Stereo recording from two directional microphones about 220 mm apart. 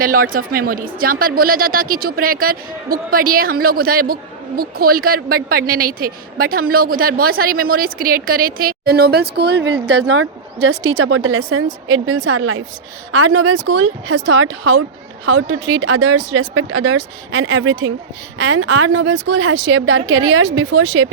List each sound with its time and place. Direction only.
0.0 s speech: 40° right (ahead or behind); by 21.1 s 70° right (ahead or behind)